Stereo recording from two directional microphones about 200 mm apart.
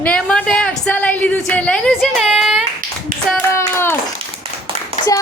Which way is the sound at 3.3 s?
10° left (ahead or behind).